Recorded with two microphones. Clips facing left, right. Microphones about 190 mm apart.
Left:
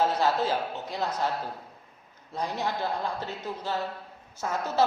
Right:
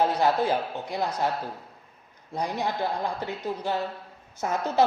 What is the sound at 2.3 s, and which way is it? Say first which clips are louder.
A woman's voice: right 2 dB; 15° right (ahead or behind).